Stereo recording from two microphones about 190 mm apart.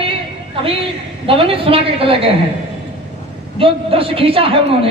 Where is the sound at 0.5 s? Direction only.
30° right (ahead or behind).